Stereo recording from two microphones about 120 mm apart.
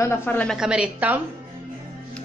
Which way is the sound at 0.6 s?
5° right (ahead or behind).